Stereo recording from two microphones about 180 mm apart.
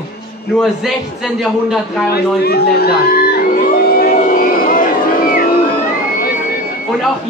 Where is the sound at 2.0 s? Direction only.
60° left (ahead or behind).